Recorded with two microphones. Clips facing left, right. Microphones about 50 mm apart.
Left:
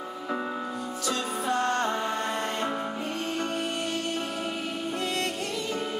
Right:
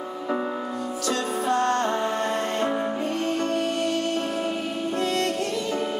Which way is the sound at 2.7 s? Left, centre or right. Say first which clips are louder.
Right 5 dB; centre.